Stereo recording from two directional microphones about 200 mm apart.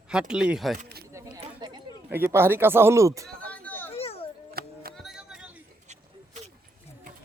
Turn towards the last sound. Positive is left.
turn(degrees=-5)  # may be behind; listen again after turning